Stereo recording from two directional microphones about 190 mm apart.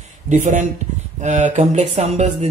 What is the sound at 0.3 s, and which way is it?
Speech, 40° right (ahead or behind).